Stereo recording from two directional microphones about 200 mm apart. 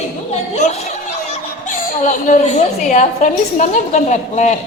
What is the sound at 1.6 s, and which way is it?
A woman's voice, 40° left (ahead or behind).